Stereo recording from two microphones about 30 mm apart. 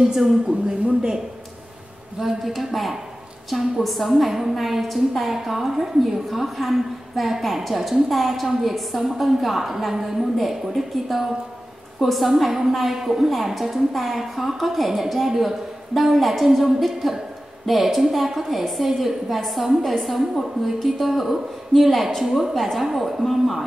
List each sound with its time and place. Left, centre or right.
0.1 s a woman's voice: centre
2.1 s a woman's voice: centre
4.3 s a woman's voice: centre
22.5 s a woman's voice: centre